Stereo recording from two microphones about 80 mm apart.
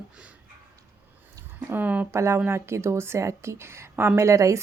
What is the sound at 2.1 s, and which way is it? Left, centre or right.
A woman's voice, right.